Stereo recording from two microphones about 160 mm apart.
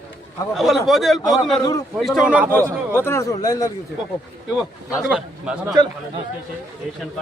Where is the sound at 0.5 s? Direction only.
Centre (ahead or behind).